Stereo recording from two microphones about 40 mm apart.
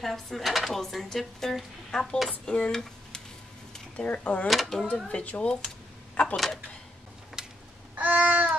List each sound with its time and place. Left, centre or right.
0.0 s speech: centre
0.4 s a child's voice: centre; by 2.7 s left
2.7 s a sound: centre
3.9 s speech: left
4.5 s speech: centre
5.0 s speech: left
6.3 s speech: centre
7.4 s a sound: centre
7.9 s babbling: right